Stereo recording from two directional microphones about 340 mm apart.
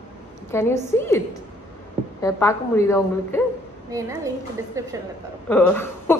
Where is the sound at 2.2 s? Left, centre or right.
Centre.